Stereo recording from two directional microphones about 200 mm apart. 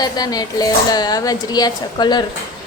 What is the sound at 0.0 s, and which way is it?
A woman's voice, 20° left (ahead or behind).